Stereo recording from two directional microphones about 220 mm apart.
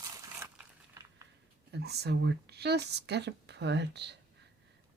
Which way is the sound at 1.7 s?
50° right (ahead or behind).